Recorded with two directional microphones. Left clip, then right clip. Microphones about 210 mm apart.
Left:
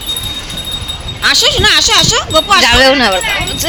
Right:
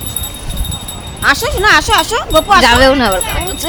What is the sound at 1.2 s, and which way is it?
Speech, 35° right (ahead or behind).